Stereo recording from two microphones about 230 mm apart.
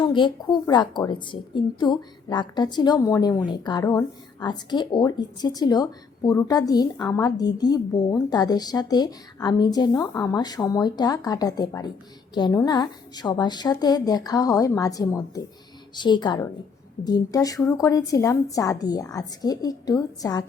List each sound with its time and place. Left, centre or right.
0.0 s a woman's voice: centre